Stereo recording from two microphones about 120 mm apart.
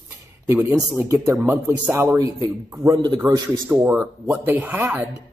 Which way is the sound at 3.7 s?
20° right (ahead or behind).